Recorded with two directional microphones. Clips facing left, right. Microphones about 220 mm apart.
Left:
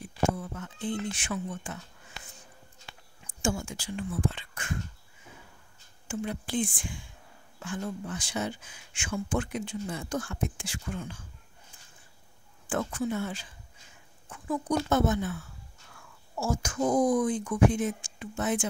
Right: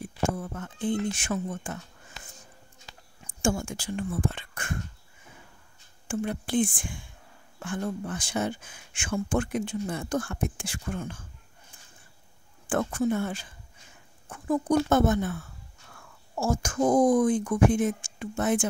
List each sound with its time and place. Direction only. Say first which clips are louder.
0.4 s speech: right 4 dB; 50° right (ahead or behind)
2.9 s speech: right 2 dB; 50° right (ahead or behind)
6.0 s speech: right 4 dB; 55° right (ahead or behind)
12.6 s speech: right 4 dB; 50° right (ahead or behind)